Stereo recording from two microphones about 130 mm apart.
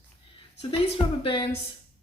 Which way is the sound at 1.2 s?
40° left (ahead or behind).